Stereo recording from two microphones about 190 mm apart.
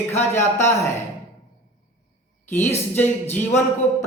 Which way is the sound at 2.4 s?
10° left (ahead or behind).